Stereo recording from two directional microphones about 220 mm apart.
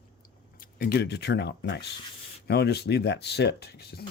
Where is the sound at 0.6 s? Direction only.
45° left (ahead or behind).